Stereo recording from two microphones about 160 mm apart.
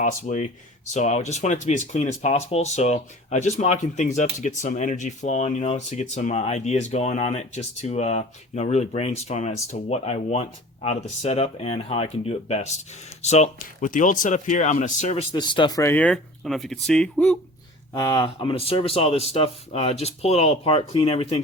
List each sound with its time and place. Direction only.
0.0 s speech: 50° left (ahead or behind)
15.3 s speech: 30° left (ahead or behind)
15.8 s speech: 10° left (ahead or behind)
18.0 s speech: 20° left (ahead or behind)
18.3 s speech: 35° left (ahead or behind)